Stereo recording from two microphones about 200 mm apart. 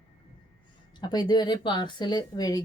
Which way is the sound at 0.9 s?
20° left (ahead or behind).